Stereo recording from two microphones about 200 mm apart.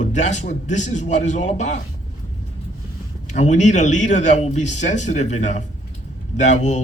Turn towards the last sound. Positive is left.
turn(degrees=35)  # may be behind; listen again after turning